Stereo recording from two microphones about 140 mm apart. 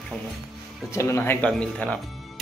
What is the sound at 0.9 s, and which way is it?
Speech, 20° left (ahead or behind).